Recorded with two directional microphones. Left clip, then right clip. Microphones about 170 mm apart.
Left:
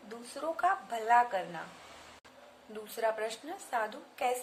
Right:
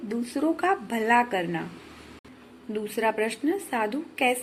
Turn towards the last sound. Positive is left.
turn(degrees=-25)  # may be behind; listen again after turning